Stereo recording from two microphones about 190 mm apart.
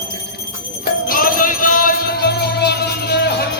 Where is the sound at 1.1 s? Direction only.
50° left (ahead or behind).